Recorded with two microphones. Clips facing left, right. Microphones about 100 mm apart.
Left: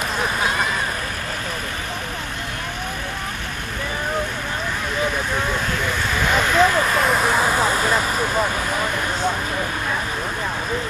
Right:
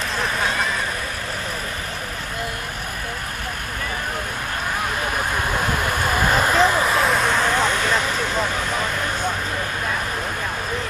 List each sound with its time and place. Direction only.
0.2 s a sound: 5° left (ahead or behind)
5.9 s vehicle: 50° right (ahead or behind)
6.5 s vehicle: 5° right (ahead or behind)